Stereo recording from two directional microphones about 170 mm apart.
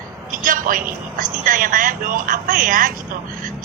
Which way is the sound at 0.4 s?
55° right (ahead or behind).